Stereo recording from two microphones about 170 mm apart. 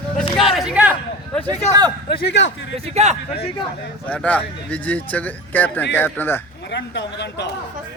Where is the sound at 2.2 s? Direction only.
85° left.